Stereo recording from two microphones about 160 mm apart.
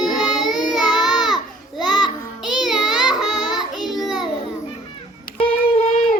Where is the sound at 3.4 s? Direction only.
25° left (ahead or behind).